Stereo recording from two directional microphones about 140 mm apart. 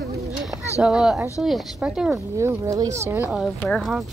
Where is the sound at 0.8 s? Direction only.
5° right (ahead or behind).